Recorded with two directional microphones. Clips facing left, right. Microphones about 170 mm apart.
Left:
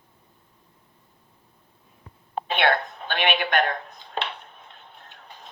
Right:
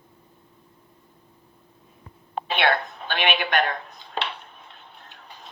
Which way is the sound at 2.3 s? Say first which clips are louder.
Even; 45° left (ahead or behind).